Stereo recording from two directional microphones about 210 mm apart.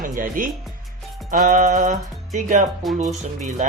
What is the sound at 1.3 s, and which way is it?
Music, 40° right (ahead or behind).